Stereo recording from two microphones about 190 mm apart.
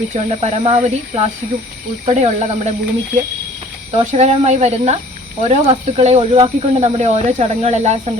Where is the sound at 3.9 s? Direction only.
35° right (ahead or behind).